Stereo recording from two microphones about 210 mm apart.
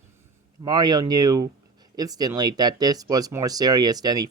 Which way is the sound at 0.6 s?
20° right (ahead or behind).